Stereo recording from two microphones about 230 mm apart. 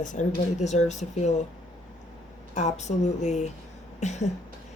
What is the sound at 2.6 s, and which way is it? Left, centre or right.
Speech, left.